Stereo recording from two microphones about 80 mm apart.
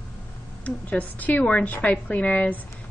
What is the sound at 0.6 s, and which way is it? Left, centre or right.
A woman's voice, centre.